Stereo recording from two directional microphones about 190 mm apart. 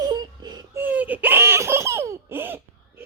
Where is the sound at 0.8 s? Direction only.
10° right (ahead or behind).